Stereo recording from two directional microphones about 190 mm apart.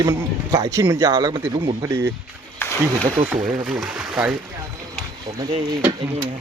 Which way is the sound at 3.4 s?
40° right (ahead or behind).